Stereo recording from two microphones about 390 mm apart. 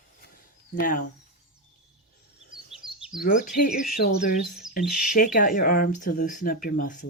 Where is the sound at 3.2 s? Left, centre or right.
Left.